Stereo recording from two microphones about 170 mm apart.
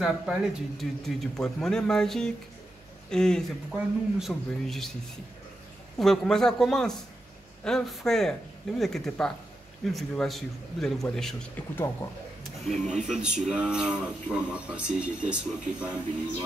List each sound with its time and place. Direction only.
0.0 s speech: centre (ahead or behind)
5.9 s speech: centre (ahead or behind)
12.9 s a man's voice: 45° right (ahead or behind)
13.2 s speech: 5° right (ahead or behind)